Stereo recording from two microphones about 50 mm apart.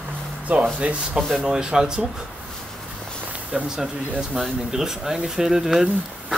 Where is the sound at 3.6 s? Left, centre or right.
Centre.